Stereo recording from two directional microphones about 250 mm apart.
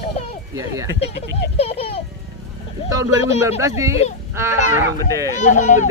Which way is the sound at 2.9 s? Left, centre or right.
Centre.